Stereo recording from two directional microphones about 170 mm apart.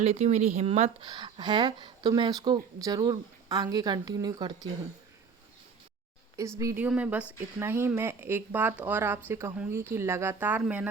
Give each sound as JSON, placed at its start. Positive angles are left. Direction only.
{"t": 0.0, "sound": "speech", "side_deg": -40}
{"t": 1.0, "sound": "speech", "side_deg": -25}
{"t": 6.6, "sound": "speech", "side_deg": -15}